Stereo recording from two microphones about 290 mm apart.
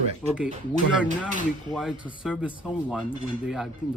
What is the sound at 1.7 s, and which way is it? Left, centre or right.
Speech, centre.